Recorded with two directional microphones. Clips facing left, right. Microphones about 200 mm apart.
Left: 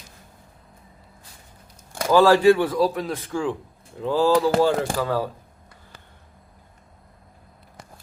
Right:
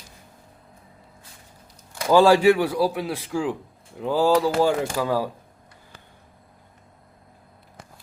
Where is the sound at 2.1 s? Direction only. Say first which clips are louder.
Even; 15° right (ahead or behind).